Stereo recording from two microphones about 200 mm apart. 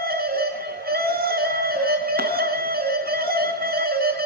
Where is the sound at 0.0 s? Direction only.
50° right (ahead or behind).